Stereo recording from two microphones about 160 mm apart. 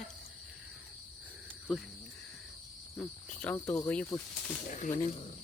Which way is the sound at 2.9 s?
15° left (ahead or behind).